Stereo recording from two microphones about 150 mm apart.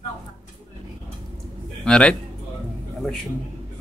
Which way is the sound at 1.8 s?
5° left (ahead or behind).